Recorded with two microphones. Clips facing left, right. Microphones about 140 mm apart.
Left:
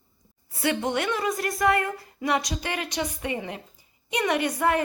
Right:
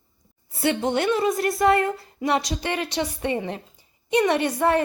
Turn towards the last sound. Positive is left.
turn(degrees=-30)  # may be behind; listen again after turning